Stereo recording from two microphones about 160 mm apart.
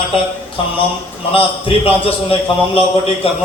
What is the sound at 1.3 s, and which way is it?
Speech, 35° left (ahead or behind).